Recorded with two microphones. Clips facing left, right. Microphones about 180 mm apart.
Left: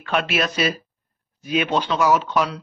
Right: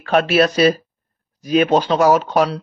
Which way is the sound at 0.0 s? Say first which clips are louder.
Right 8 dB; 40° right (ahead or behind).